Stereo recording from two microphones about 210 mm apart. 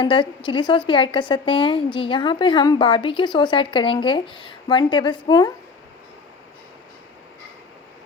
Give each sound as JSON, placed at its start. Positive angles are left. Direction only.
{"t": 0.0, "sound": "speech", "side_deg": 25}